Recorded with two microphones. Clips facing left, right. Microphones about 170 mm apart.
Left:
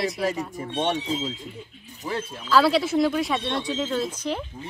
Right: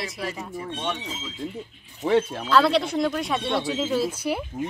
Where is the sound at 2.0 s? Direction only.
70° right (ahead or behind).